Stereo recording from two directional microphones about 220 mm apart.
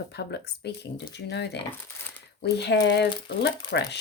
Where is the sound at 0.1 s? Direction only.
50° left (ahead or behind).